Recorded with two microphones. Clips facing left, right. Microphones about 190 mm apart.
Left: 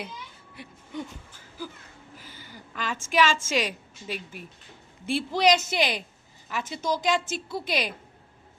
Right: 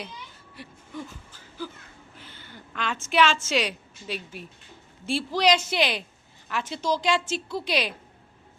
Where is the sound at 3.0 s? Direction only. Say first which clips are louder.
Right 1 dB; 50° left (ahead or behind).